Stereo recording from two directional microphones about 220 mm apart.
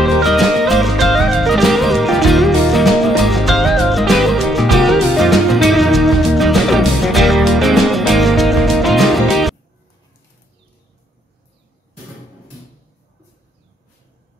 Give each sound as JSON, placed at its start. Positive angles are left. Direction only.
{"t": 0.0, "sound": "music", "side_deg": 0}